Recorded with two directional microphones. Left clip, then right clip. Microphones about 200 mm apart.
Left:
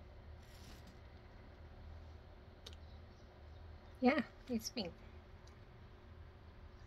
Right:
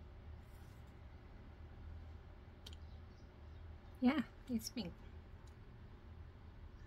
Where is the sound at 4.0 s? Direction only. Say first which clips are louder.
Left 3 dB; 20° right (ahead or behind).